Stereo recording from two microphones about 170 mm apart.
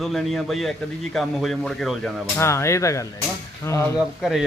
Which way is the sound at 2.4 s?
15° left (ahead or behind).